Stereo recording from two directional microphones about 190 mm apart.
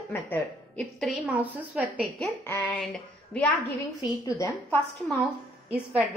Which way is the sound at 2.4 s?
10° left (ahead or behind).